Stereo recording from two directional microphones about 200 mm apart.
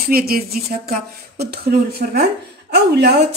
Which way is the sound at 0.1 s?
50° right (ahead or behind).